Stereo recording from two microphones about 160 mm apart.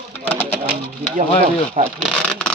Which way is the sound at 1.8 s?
45° right (ahead or behind).